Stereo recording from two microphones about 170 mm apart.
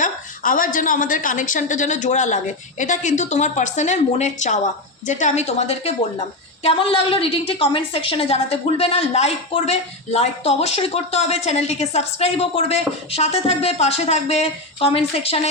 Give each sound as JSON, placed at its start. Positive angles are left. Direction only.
{"t": 0.0, "sound": "a woman's voice", "side_deg": 55}